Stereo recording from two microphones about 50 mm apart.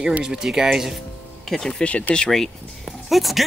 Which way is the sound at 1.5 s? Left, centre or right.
Centre.